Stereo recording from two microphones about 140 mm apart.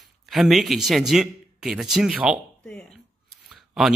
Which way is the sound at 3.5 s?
5° right (ahead or behind).